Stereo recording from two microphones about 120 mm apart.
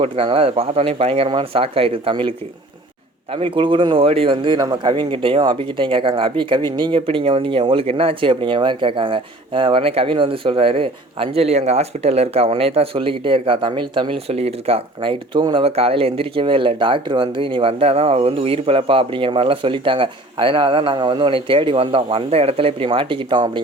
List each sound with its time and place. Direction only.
0.0 s speech: 50° right (ahead or behind)
3.3 s speech: 45° right (ahead or behind)
4.6 s speech: 35° right (ahead or behind)